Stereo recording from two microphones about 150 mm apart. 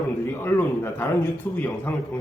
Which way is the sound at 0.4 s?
15° left (ahead or behind).